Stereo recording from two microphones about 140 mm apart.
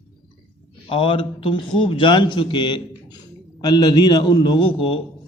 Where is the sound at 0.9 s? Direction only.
40° left (ahead or behind).